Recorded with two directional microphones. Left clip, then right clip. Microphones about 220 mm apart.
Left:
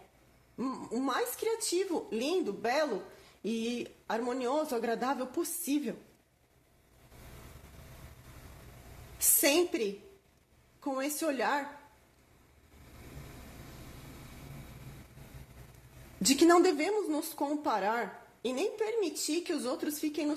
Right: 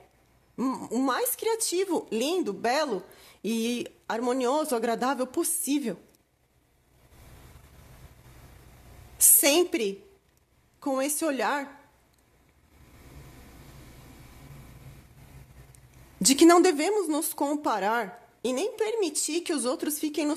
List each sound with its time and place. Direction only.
0.6 s a woman's voice: 50° right (ahead or behind)
9.2 s a woman's voice: 45° right (ahead or behind)
16.3 s a woman's voice: 45° right (ahead or behind)